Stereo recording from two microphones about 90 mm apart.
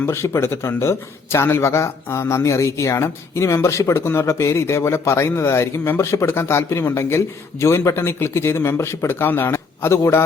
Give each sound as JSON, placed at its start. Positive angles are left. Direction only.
{"t": 0.0, "sound": "speech", "side_deg": 30}